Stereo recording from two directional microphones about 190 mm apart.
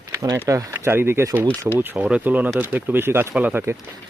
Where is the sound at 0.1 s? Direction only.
20° right (ahead or behind).